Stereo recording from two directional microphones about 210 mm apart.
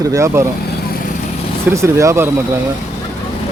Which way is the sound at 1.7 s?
15° right (ahead or behind).